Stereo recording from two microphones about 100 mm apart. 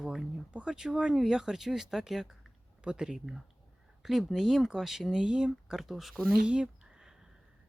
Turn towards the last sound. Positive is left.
turn(degrees=-10)  # may be behind; listen again after turning